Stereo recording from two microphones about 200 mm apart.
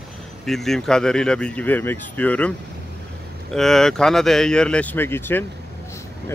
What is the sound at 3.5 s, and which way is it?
Speech, centre (ahead or behind).